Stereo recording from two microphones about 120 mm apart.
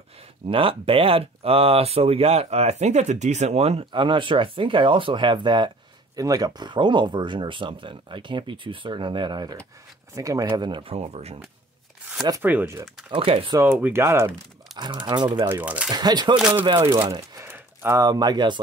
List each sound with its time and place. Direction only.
0.5 s speech: 50° right (ahead or behind); by 10.4 s 30° right (ahead or behind)
10.5 s speech: 40° right (ahead or behind); by 11.3 s 60° right (ahead or behind)
12.4 s speech: 15° right (ahead or behind)
13.1 s speech: 50° right (ahead or behind)
13.7 s speech: 15° right (ahead or behind)
14.8 s speech: 40° right (ahead or behind)
15.4 s speech: 15° right (ahead or behind)
15.9 s speech: 35° right (ahead or behind)
17.4 s speech: 25° right (ahead or behind)